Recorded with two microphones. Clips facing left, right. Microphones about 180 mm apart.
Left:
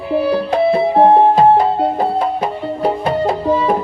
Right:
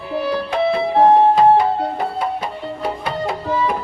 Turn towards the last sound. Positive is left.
turn(degrees=30)  # may be behind; listen again after turning